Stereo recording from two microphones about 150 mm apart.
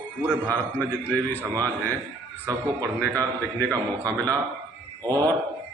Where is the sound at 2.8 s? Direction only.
20° right (ahead or behind).